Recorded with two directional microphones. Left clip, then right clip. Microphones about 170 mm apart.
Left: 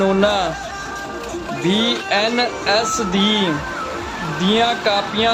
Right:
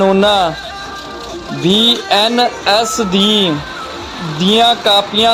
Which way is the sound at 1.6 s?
30° right (ahead or behind).